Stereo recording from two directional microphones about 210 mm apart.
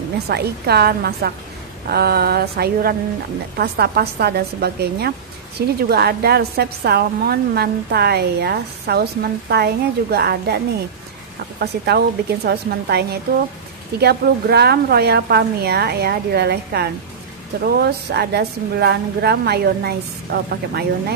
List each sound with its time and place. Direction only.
0.3 s a woman's voice: 50° right (ahead or behind)
11.6 s a woman's voice: 50° right (ahead or behind)